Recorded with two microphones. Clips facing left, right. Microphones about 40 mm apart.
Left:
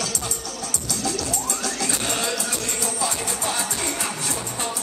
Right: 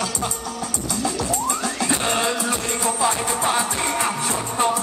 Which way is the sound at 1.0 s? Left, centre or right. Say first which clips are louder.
Right 4 dB; right.